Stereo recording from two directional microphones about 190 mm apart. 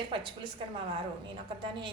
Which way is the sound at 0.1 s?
25° right (ahead or behind).